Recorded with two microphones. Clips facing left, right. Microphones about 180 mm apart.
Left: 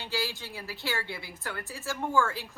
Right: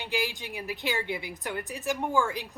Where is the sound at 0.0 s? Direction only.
15° right (ahead or behind).